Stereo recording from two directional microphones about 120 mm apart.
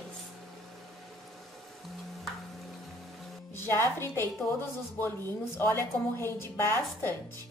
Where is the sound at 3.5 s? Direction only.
20° left (ahead or behind).